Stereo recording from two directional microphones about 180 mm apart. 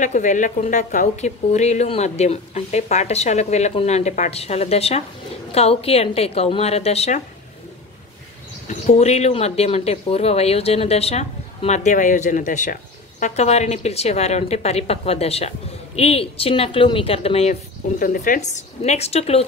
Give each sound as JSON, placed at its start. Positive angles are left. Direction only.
{"t": 0.0, "sound": "a woman's voice", "side_deg": 45}
{"t": 8.6, "sound": "a woman's voice", "side_deg": 35}